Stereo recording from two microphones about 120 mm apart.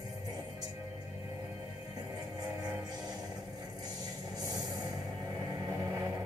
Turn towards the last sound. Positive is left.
turn(degrees=-30)  # may be behind; listen again after turning